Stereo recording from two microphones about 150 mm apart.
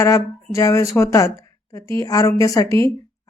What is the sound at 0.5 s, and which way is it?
A woman's voice, 20° left (ahead or behind).